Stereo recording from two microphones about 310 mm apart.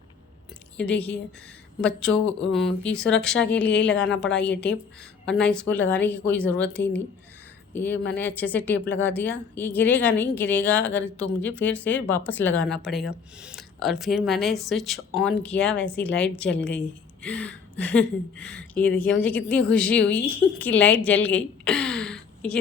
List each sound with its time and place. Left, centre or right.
0.8 s speech: centre
3.8 s a woman's voice: left
5.2 s speech: centre
16.5 s a woman's voice: left
17.2 s speech: centre